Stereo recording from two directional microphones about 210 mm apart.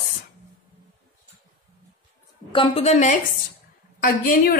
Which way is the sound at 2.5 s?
25° left (ahead or behind).